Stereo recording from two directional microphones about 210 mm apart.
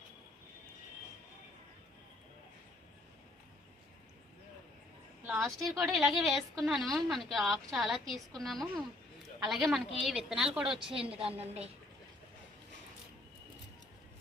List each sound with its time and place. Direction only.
5.2 s a woman's voice: 5° right (ahead or behind)
11.3 s a woman's voice: 30° right (ahead or behind)